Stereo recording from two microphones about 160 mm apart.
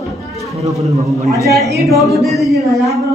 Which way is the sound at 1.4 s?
Centre (ahead or behind).